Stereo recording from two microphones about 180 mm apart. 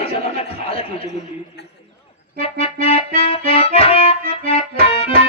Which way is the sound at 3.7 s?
35° left (ahead or behind).